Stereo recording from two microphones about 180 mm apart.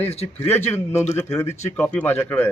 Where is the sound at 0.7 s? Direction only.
15° left (ahead or behind).